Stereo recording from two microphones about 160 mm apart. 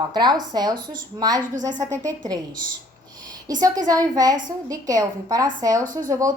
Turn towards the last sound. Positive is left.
turn(degrees=-20)  # may be behind; listen again after turning